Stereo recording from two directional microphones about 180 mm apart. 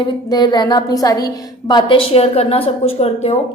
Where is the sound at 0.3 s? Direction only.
25° left (ahead or behind).